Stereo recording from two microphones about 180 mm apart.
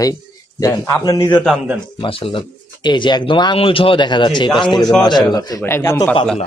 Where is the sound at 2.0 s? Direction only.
30° left (ahead or behind).